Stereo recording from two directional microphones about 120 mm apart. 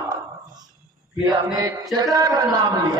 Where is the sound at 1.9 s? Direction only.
30° right (ahead or behind).